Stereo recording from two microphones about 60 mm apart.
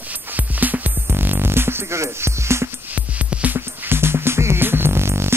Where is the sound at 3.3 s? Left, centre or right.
Right.